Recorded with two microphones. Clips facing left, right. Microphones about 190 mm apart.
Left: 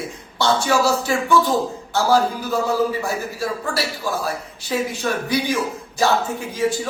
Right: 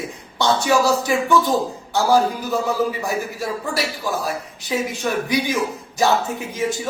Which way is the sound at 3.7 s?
15° right (ahead or behind).